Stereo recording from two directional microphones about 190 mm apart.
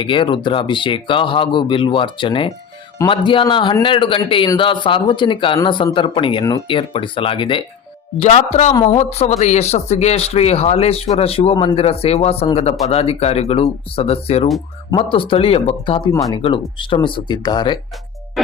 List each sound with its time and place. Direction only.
0.0 s speech: 25° left (ahead or behind)
18.4 s music: centre (ahead or behind)